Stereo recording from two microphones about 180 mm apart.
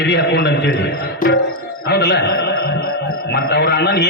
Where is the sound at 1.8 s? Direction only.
70° left (ahead or behind).